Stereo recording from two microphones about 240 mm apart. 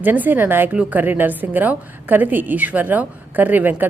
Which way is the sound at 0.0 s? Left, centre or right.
Centre.